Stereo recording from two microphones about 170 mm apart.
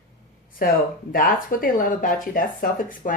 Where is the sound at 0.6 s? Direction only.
55° left (ahead or behind).